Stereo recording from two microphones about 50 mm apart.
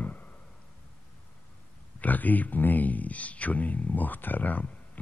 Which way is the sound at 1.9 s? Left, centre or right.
Left.